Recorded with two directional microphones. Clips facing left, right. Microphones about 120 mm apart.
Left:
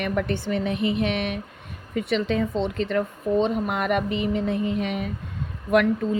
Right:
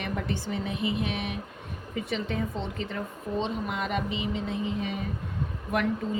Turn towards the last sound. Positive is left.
turn(degrees=80)